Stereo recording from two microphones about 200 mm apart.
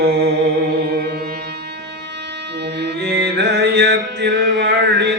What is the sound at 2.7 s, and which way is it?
Music, 55° right (ahead or behind).